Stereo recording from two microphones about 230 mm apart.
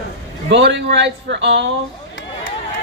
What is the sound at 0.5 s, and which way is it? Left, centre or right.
Speech, right.